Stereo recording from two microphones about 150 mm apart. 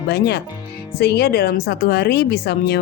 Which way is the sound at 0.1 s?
90° left.